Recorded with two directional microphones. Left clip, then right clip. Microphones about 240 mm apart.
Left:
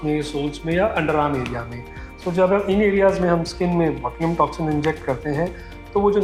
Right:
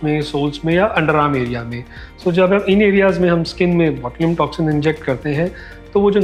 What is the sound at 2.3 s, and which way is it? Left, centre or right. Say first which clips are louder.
Speech: right 4 dB; right.